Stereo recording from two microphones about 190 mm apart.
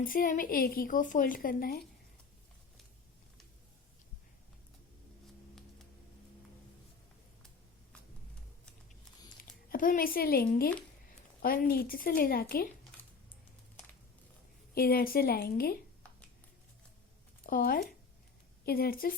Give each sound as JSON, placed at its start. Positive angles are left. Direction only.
{"t": 0.0, "sound": "a woman's voice", "side_deg": 45}
{"t": 9.4, "sound": "a woman's voice", "side_deg": 45}
{"t": 14.8, "sound": "a woman's voice", "side_deg": 55}
{"t": 17.4, "sound": "a woman's voice", "side_deg": 50}